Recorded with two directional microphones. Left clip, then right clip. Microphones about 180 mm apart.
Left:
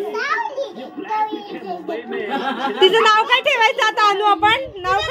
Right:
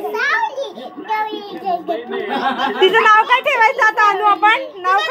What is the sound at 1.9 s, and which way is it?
Speech, 5° left (ahead or behind).